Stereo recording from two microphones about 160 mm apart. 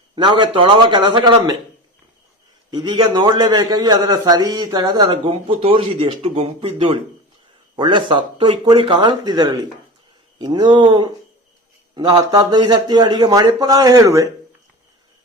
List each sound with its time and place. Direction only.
0.2 s a man's voice: 30° right (ahead or behind)
2.6 s a man's voice: 30° right (ahead or behind)